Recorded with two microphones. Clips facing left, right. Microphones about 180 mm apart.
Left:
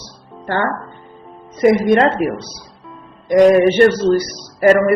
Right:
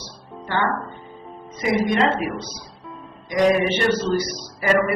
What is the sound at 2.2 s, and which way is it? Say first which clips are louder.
A man's voice: left 7 dB; 45° left (ahead or behind).